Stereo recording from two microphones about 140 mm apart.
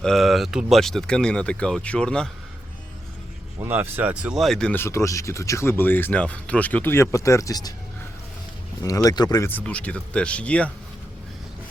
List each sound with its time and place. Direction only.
0.0 s speech: centre (ahead or behind)
3.6 s speech: 15° right (ahead or behind); by 4.8 s 5° left (ahead or behind)
4.8 s speech: 20° left (ahead or behind)
9.0 s speech: 30° left (ahead or behind)
9.5 s speech: 10° left (ahead or behind)